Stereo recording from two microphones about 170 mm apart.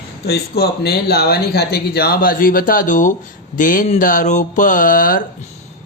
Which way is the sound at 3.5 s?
50° left (ahead or behind).